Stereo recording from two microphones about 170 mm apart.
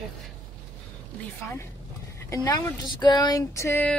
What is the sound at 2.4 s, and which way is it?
Speech, 20° left (ahead or behind).